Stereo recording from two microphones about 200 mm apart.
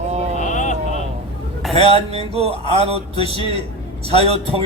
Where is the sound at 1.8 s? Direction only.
30° right (ahead or behind).